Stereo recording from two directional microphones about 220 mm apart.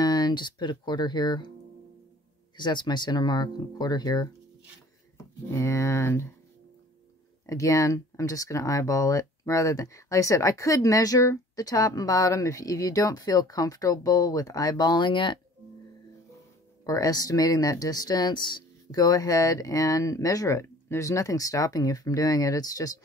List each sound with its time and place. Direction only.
0.0 s speech: 20° left (ahead or behind)
2.5 s speech: 20° left (ahead or behind)
7.4 s speech: 15° left (ahead or behind)
16.8 s speech: 15° left (ahead or behind)